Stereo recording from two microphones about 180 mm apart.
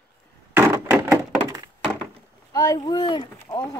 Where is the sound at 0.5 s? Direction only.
15° right (ahead or behind).